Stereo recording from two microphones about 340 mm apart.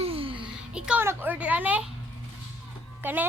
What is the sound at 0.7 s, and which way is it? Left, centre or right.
A child's voice, centre.